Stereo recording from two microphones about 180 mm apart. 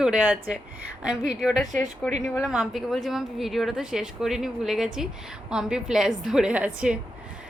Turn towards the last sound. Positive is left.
turn(degrees=-5)  # may be behind; listen again after turning